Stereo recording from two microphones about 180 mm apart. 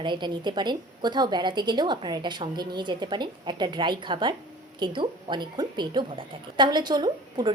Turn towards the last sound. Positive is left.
turn(degrees=-25)  # may be behind; listen again after turning